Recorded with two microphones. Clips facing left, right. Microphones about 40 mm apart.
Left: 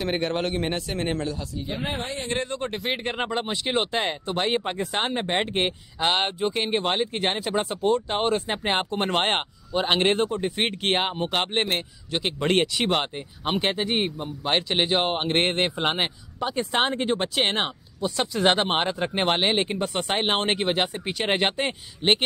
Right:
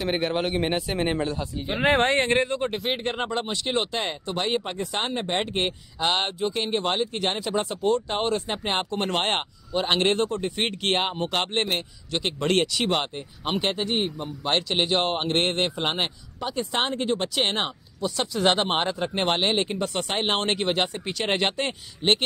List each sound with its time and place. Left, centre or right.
0.0 s speech: centre
1.2 s speech: right
1.8 s speech: right
2.4 s speech: centre
3.2 s a man's voice: centre